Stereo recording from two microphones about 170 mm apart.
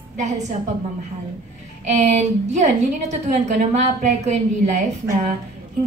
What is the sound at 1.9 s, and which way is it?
A woman's voice, 45° right (ahead or behind).